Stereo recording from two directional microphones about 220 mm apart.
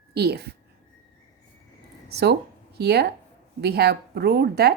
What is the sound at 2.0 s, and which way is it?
Speech, 45° right (ahead or behind).